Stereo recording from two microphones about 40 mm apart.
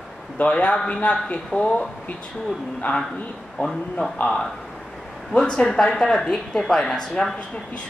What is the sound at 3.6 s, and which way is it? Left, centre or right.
Speech, left.